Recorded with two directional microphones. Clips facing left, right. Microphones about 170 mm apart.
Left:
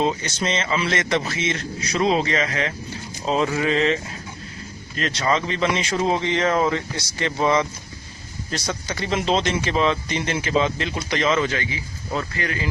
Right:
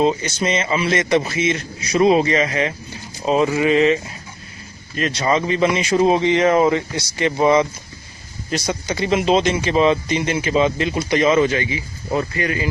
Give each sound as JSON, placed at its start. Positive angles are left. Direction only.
{"t": 0.0, "sound": "speech", "side_deg": -15}